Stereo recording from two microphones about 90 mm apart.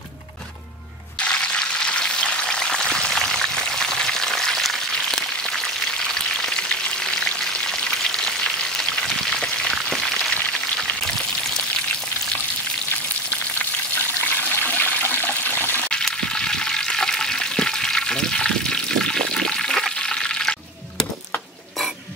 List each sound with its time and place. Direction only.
1.3 s frying: 10° left (ahead or behind)
9.8 s a sound: 5° left (ahead or behind)
14.2 s water: 20° left (ahead or behind)
15.9 s frying: 10° left (ahead or behind)